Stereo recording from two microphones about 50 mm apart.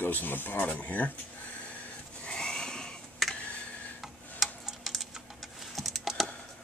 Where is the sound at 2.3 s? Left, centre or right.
Centre.